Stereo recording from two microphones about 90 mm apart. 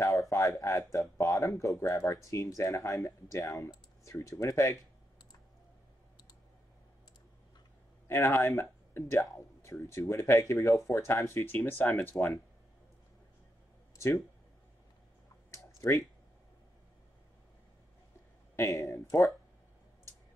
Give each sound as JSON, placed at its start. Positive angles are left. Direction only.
{"t": 0.0, "sound": "speech", "side_deg": 35}
{"t": 8.1, "sound": "speech", "side_deg": 30}
{"t": 15.8, "sound": "speech", "side_deg": 35}
{"t": 18.6, "sound": "speech", "side_deg": 35}